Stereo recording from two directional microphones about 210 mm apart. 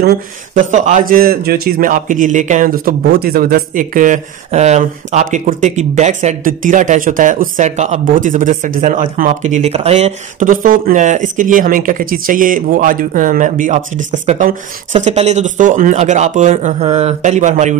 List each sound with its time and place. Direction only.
0.0 s speech: 50° right (ahead or behind)
0.7 s a man's voice: 35° right (ahead or behind)